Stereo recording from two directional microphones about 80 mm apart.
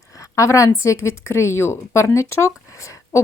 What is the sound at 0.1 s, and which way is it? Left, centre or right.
Speech, left.